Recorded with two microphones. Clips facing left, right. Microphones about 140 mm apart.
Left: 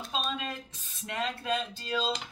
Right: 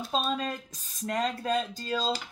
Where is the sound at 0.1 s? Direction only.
40° right (ahead or behind).